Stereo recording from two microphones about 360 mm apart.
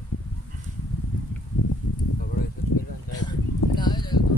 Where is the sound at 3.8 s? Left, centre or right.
Centre.